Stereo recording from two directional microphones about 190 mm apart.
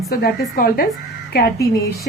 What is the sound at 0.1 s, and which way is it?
Speech, 55° left (ahead or behind).